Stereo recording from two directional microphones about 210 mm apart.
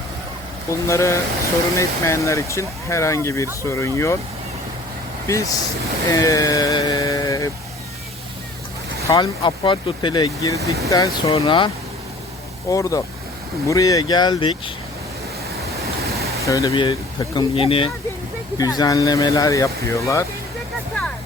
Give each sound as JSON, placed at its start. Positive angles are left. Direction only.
{"t": 0.7, "sound": "speech", "side_deg": 15}
{"t": 5.3, "sound": "speech", "side_deg": 15}
{"t": 6.1, "sound": "a sound", "side_deg": 15}
{"t": 9.0, "sound": "speech", "side_deg": 20}
{"t": 10.6, "sound": "speech", "side_deg": -15}
{"t": 10.8, "sound": "speech", "side_deg": 15}
{"t": 11.3, "sound": "speech", "side_deg": 25}
{"t": 12.7, "sound": "speech", "side_deg": 15}
{"t": 16.5, "sound": "speech", "side_deg": 15}